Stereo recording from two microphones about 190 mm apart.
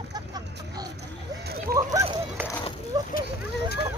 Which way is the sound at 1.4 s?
55° right (ahead or behind).